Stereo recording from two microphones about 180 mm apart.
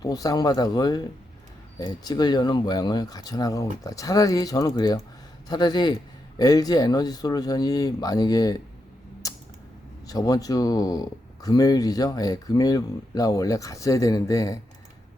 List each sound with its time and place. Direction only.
0.0 s speech: 20° left (ahead or behind)
9.2 s creak: 20° left (ahead or behind)
10.1 s speech: 20° left (ahead or behind)